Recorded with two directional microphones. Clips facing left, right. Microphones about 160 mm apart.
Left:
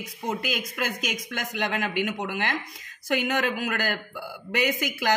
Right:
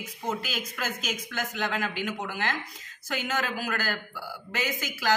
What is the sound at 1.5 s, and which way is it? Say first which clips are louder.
Speech: left 4 dB; 20° left (ahead or behind).